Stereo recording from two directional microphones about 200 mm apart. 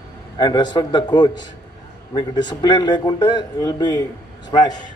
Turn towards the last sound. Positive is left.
turn(degrees=20)  # may be behind; listen again after turning